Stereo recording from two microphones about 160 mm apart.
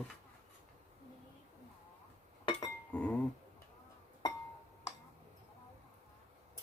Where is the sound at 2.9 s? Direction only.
10° left (ahead or behind).